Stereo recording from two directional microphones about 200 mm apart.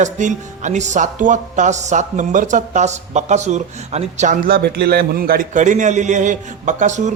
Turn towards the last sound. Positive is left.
turn(degrees=-35)  # may be behind; listen again after turning